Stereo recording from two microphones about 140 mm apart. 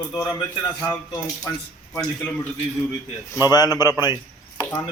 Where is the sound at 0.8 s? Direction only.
25° left (ahead or behind).